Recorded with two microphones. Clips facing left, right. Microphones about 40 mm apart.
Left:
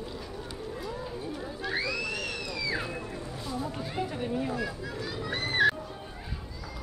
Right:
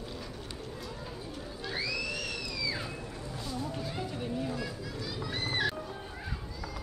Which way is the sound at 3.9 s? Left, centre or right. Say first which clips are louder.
Left 4 dB; left.